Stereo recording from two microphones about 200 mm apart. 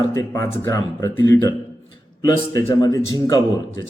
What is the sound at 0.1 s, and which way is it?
Speech, 15° left (ahead or behind).